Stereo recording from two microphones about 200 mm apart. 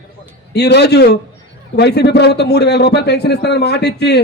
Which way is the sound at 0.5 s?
55° left (ahead or behind).